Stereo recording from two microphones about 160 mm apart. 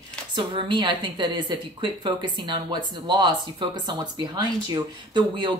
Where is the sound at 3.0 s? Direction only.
30° right (ahead or behind).